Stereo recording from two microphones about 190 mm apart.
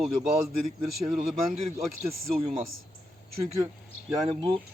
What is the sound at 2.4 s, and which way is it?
Speech, 35° right (ahead or behind).